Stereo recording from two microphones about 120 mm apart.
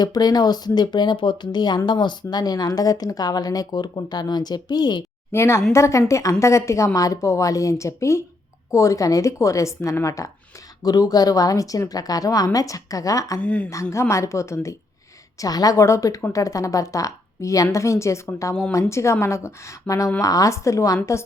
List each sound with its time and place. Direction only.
0.0 s speech: 35° left (ahead or behind)
5.3 s a woman's voice: 20° left (ahead or behind)
13.4 s speech: 10° left (ahead or behind)
13.9 s a woman's voice: 25° left (ahead or behind)